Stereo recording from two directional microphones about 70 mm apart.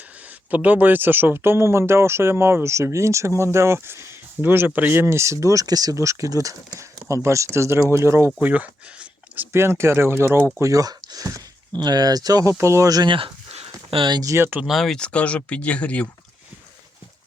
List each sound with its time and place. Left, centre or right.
0.5 s speech: right
8.4 s speech: right
9.5 s speech: right
10.6 s speech: right
11.8 s speech: right
12.5 s speech: right
14.3 s speech: right
14.7 s speech: centre
14.9 s speech: centre